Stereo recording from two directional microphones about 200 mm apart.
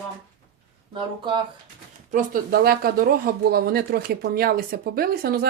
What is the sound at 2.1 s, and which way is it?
Speech, 45° right (ahead or behind).